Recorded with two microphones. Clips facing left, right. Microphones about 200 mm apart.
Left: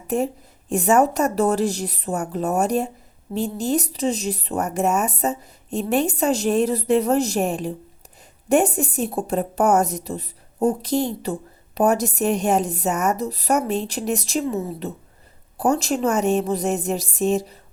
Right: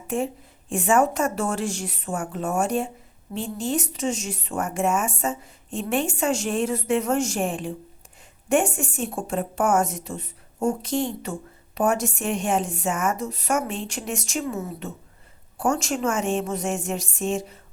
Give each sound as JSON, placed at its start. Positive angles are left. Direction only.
{"t": 0.1, "sound": "a woman's voice", "side_deg": 40}